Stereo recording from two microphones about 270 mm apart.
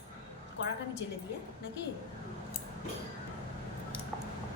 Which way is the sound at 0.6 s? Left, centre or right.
Left.